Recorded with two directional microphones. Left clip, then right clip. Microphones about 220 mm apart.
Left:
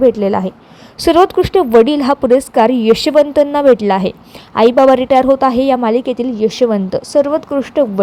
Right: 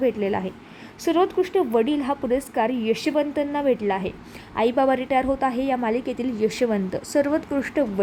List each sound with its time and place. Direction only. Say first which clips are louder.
0.0 s speech: left 11 dB; 15° left (ahead or behind)
0.9 s a woman's voice: left 11 dB; 25° left (ahead or behind)